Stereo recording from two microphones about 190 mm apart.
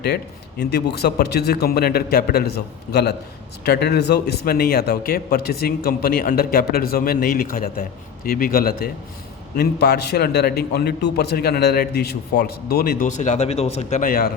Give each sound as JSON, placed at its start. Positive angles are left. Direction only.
{"t": 0.6, "sound": "a man's voice", "side_deg": 60}